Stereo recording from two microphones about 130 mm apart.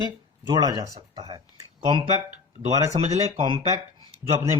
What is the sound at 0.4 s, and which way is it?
Speech, 30° right (ahead or behind).